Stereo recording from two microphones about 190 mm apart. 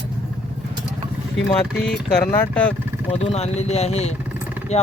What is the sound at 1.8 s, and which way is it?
Speech, 60° left (ahead or behind).